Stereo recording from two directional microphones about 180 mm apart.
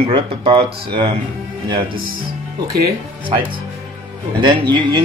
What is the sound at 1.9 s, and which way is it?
Speech, 55° right (ahead or behind).